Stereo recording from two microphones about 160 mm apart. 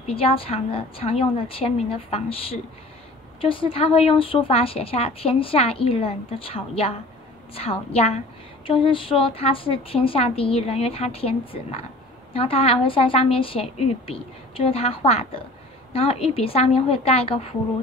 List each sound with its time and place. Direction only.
0.1 s a woman's voice: 35° left (ahead or behind)